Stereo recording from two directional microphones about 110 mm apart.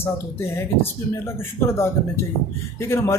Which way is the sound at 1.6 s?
25° left (ahead or behind).